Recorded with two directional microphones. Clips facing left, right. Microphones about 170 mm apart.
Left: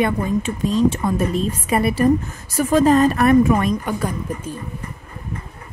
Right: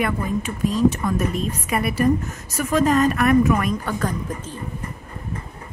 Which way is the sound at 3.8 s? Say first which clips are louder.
Left 1 dB; 10° left (ahead or behind).